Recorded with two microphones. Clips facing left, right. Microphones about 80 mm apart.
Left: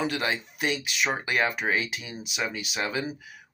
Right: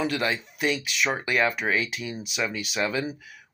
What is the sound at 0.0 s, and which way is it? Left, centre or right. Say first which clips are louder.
Speech: right 2 dB; centre.